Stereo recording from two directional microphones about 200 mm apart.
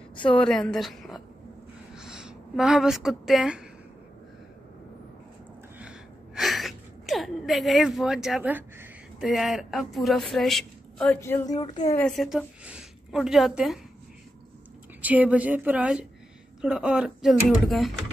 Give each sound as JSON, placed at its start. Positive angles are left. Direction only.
{"t": 0.1, "sound": "a sound", "side_deg": 25}
{"t": 0.4, "sound": "a woman's voice", "side_deg": 5}
{"t": 5.8, "sound": "a sound", "side_deg": -5}
{"t": 11.1, "sound": "speech", "side_deg": 15}
{"t": 12.0, "sound": "a woman's voice", "side_deg": 0}
{"t": 15.0, "sound": "a woman's voice", "side_deg": -10}